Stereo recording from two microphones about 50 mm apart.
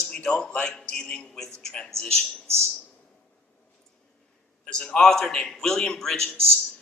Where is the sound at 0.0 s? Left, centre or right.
Centre.